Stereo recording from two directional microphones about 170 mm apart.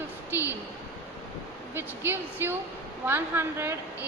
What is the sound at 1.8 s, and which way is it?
A woman's voice, 15° right (ahead or behind).